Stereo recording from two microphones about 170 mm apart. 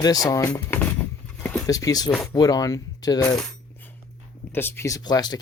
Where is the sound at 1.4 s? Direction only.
10° left (ahead or behind).